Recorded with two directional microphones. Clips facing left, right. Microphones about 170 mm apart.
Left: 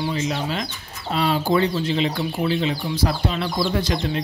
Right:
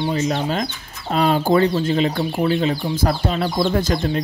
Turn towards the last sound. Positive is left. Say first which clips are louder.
# right 3 dB
turn(degrees=-45)  # may be behind; listen again after turning